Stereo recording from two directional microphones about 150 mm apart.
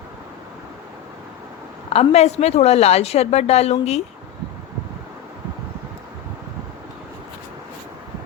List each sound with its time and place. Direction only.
1.9 s a woman's voice: 45° left (ahead or behind)